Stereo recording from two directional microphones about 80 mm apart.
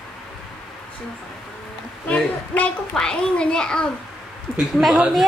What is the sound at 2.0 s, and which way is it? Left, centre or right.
A child's voice, centre.